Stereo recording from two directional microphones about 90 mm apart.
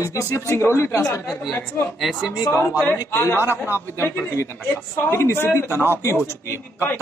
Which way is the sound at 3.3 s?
25° right (ahead or behind).